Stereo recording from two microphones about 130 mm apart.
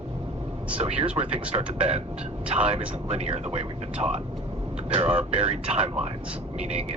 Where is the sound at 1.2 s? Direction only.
40° right (ahead or behind); by 3.6 s 55° right (ahead or behind).